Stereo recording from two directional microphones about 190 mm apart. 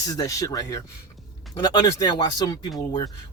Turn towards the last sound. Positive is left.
turn(degrees=20)  # may be behind; listen again after turning